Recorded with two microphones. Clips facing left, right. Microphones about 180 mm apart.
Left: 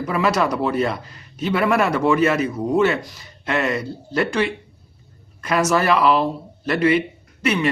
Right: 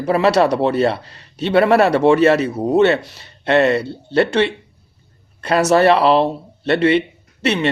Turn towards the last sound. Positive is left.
turn(degrees=-30)  # may be behind; listen again after turning